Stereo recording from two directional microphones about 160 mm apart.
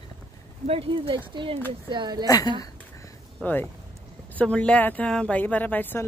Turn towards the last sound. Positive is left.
turn(degrees=10)  # may be behind; listen again after turning